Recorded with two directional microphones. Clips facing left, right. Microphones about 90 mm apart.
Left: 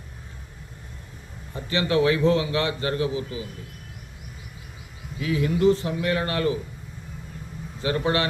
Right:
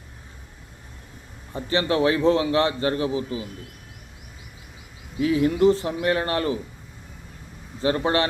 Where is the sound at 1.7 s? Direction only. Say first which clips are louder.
Even; 35° right (ahead or behind).